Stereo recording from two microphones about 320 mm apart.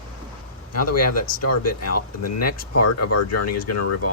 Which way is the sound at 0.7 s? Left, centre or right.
Left.